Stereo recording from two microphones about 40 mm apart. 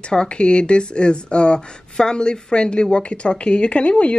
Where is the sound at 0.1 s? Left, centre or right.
Left.